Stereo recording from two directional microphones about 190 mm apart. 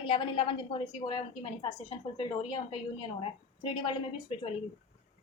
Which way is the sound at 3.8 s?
30° left (ahead or behind).